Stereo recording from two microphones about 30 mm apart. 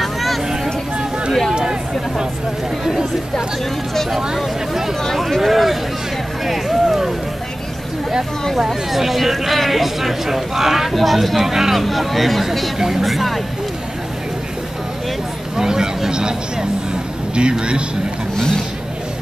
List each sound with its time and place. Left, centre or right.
0.0 s vehicle: centre
1.5 s a sound: right
4.4 s speech: centre
6.4 s a sound: centre
8.6 s speech: centre
10.9 s speech: centre
12.7 s speech: centre
13.0 s speech: centre
15.5 s speech: right
17.4 s a man's voice: right